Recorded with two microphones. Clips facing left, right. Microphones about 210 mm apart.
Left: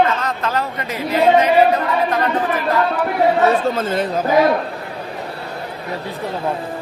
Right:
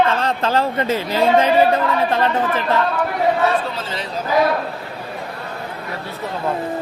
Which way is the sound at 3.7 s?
50° left (ahead or behind).